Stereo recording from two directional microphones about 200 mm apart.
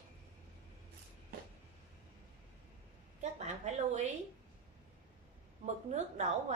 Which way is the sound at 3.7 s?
35° right (ahead or behind).